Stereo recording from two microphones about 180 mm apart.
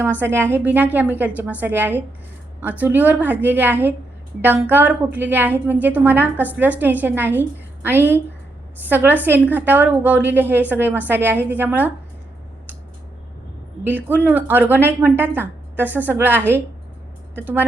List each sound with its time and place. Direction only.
0.2 s a woman's voice: 10° right (ahead or behind)
13.8 s a woman's voice: 10° right (ahead or behind)